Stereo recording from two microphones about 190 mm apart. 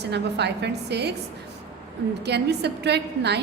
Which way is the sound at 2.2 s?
60° right (ahead or behind).